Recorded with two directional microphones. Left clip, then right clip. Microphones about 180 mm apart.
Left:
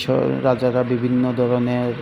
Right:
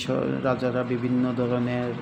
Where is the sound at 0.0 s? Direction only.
35° left (ahead or behind).